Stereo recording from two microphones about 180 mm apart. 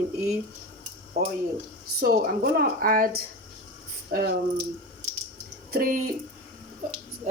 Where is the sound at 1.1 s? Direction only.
65° right (ahead or behind).